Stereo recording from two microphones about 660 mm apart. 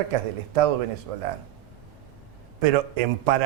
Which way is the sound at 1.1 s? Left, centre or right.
Right.